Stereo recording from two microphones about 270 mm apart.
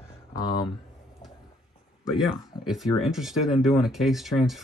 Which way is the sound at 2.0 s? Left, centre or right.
Centre.